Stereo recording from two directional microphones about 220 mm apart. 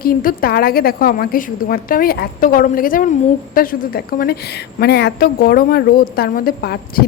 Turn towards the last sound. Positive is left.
turn(degrees=45)  # may be behind; listen again after turning